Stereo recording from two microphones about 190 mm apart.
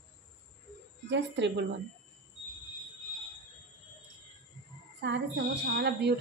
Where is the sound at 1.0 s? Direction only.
70° right (ahead or behind).